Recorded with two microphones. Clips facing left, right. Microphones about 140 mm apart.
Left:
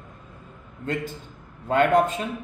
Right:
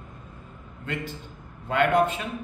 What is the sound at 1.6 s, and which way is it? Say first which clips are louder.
Speech: left 3 dB; 40° left (ahead or behind).